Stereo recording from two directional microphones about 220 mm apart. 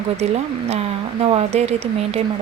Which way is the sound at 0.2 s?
30° right (ahead or behind).